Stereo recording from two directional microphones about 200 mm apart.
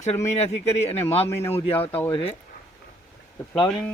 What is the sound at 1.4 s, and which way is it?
Speech, 10° left (ahead or behind).